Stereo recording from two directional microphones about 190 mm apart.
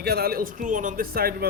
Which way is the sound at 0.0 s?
55° right (ahead or behind).